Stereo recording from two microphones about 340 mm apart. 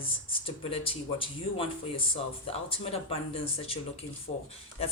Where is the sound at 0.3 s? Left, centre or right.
Centre.